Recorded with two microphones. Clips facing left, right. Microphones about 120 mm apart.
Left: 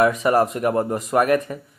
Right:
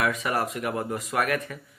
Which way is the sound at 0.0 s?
35° left (ahead or behind).